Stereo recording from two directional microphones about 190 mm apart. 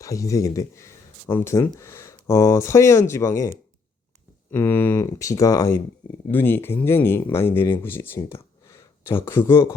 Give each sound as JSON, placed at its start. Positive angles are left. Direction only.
{"t": 0.0, "sound": "speech", "side_deg": 15}
{"t": 4.5, "sound": "speech", "side_deg": 10}